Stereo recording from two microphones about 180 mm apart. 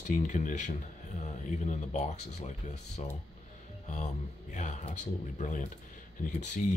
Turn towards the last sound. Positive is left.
turn(degrees=45)  # may be behind; listen again after turning